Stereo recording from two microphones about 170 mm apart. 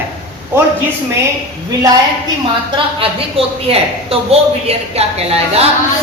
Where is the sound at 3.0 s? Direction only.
35° right (ahead or behind).